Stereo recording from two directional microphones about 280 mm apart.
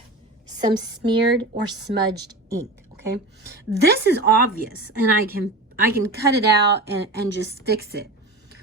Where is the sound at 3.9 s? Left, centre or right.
Right.